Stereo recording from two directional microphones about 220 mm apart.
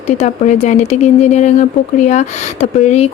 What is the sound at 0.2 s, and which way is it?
Speech, 30° left (ahead or behind).